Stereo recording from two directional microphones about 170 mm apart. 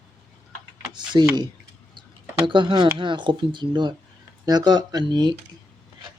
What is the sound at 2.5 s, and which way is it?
Speech, 30° right (ahead or behind).